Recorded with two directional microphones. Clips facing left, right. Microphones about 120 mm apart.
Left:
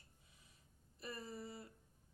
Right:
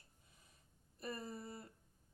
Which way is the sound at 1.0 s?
45° right (ahead or behind).